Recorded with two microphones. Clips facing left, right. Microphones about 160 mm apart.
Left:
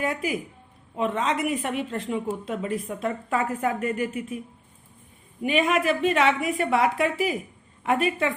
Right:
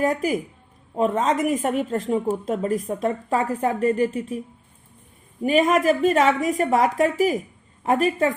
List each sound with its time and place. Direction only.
0.0 s a woman's voice: 40° right (ahead or behind)
5.4 s a woman's voice: 40° right (ahead or behind)